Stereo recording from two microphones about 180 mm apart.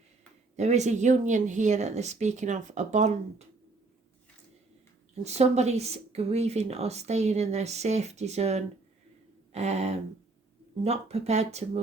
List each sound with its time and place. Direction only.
0.5 s speech: 40° right (ahead or behind)
5.2 s speech: 35° right (ahead or behind)